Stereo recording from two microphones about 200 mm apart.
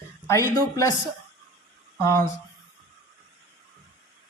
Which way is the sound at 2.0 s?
15° left (ahead or behind).